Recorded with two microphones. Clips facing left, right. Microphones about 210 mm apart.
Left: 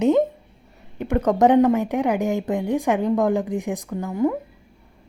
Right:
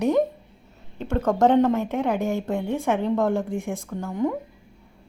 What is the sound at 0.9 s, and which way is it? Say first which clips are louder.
A woman's voice: left 3 dB; 15° left (ahead or behind).